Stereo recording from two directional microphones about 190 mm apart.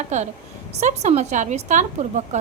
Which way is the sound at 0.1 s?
35° right (ahead or behind).